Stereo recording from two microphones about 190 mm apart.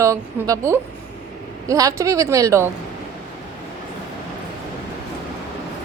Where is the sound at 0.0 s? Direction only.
15° right (ahead or behind).